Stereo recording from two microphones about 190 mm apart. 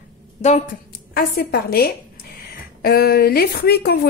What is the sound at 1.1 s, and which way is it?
A woman's voice, 55° left (ahead or behind).